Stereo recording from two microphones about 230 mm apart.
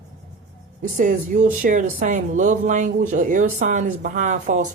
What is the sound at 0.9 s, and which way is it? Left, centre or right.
Speech, right.